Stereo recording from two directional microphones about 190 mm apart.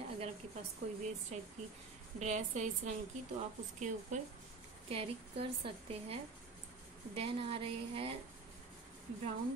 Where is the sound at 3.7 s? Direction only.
40° right (ahead or behind).